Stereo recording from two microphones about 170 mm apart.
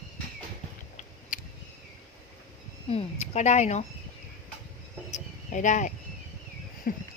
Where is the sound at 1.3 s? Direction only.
50° left (ahead or behind).